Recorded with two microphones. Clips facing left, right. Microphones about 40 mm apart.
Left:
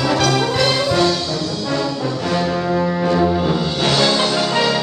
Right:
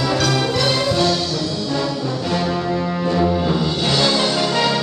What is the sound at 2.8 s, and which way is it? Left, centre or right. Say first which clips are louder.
Music: left 4 dB; centre.